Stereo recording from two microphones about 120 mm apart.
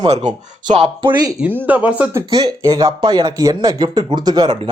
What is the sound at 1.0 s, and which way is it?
Speech, 45° right (ahead or behind).